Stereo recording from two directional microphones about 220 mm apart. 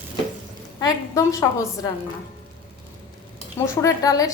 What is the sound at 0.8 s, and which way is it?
A woman's voice, 15° left (ahead or behind).